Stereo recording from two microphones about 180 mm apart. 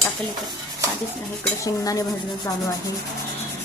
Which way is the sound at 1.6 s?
20° left (ahead or behind).